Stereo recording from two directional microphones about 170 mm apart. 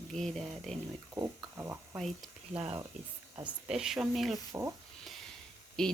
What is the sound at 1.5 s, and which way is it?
Stir, 15° right (ahead or behind).